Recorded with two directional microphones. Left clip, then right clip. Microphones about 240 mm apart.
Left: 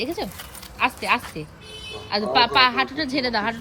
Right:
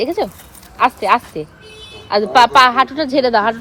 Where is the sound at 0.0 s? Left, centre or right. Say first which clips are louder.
Right 10 dB; right.